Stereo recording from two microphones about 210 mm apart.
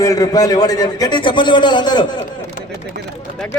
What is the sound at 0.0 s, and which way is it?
A man's voice, 15° left (ahead or behind).